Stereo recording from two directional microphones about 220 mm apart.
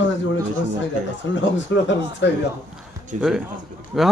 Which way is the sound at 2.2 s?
55° left (ahead or behind).